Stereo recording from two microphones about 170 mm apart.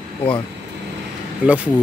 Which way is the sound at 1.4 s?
10° right (ahead or behind).